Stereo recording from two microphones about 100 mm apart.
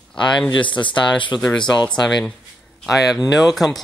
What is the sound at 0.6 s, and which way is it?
Speech, 55° left (ahead or behind).